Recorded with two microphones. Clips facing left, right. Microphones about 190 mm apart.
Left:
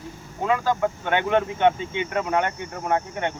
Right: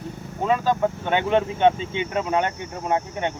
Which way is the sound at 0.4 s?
20° right (ahead or behind).